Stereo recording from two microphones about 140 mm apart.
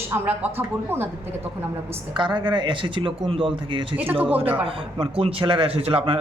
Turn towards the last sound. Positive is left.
turn(degrees=-40)  # may be behind; listen again after turning